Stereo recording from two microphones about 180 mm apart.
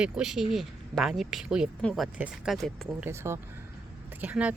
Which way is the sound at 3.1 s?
15° right (ahead or behind).